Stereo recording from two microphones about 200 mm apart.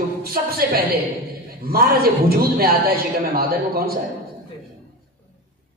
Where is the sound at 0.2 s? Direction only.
50° right (ahead or behind).